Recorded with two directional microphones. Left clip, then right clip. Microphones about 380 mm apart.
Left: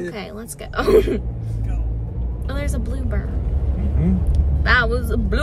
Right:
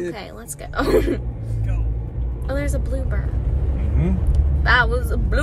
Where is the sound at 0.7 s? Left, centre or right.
Centre.